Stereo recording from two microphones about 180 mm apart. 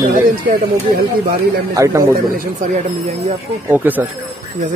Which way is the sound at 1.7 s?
20° right (ahead or behind).